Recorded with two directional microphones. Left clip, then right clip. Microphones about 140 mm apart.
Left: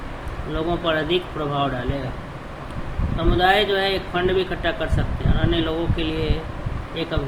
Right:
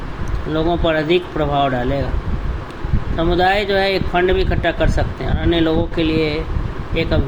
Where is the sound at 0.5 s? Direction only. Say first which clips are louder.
Right 5 dB; 50° right (ahead or behind).